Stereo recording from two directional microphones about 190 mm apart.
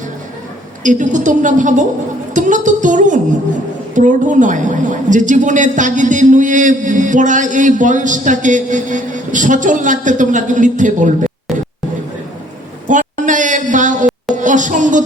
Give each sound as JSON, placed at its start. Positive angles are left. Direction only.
{"t": 0.8, "sound": "a woman's voice", "side_deg": -40}
{"t": 2.3, "sound": "music", "side_deg": -40}
{"t": 3.9, "sound": "a woman's voice", "side_deg": -40}
{"t": 12.9, "sound": "a sound", "side_deg": -40}